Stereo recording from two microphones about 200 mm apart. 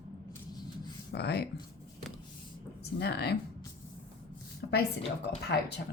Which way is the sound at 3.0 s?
55° left (ahead or behind).